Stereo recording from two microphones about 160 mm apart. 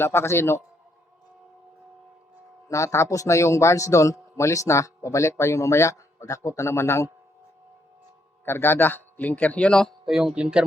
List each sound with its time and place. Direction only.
0.0 s a man's voice: 15° left (ahead or behind)
2.6 s a man's voice: 20° left (ahead or behind)
8.4 s a man's voice: 15° left (ahead or behind); by 10.7 s 5° right (ahead or behind)